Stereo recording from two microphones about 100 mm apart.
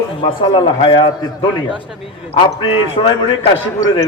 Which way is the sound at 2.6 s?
65° left (ahead or behind).